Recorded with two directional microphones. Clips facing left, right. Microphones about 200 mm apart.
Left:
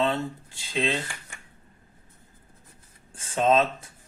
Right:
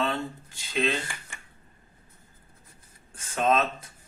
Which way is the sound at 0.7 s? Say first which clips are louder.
Even; 30° left (ahead or behind).